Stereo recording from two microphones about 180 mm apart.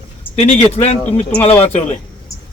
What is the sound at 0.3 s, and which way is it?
Speech, 35° left (ahead or behind).